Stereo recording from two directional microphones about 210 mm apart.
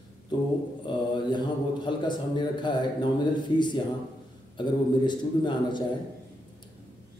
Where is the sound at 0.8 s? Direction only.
20° left (ahead or behind).